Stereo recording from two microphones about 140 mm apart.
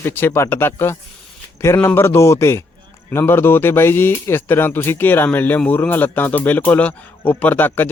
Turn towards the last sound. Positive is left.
turn(degrees=15)  # may be behind; listen again after turning